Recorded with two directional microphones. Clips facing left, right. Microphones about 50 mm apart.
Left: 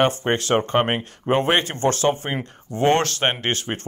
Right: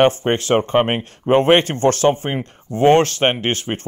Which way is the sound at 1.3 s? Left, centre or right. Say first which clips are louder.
Right 6 dB; right.